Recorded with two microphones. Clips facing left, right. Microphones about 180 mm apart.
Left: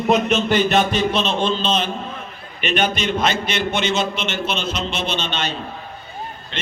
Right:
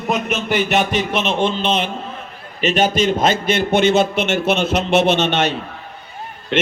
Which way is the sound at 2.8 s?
45° right (ahead or behind).